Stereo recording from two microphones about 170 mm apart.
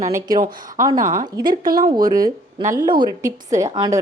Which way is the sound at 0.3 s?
55° right (ahead or behind).